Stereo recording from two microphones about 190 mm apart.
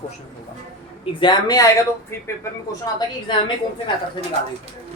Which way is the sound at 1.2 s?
20° left (ahead or behind).